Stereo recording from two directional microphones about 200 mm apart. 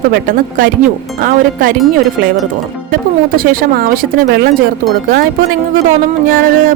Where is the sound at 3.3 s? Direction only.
45° right (ahead or behind).